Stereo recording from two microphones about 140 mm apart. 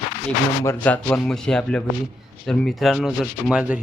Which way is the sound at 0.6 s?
15° left (ahead or behind).